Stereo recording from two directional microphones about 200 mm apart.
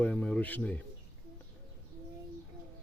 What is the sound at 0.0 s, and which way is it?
Speech, 5° left (ahead or behind).